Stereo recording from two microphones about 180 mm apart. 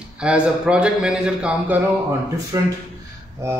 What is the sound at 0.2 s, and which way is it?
A man's voice, 5° right (ahead or behind).